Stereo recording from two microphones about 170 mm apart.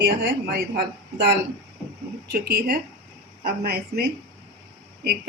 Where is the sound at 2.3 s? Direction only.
70° right (ahead or behind).